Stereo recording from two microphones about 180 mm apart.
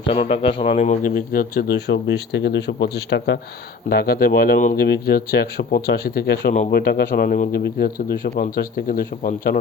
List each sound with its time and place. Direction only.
0.0 s speech: 30° left (ahead or behind); by 9.6 s 55° left (ahead or behind)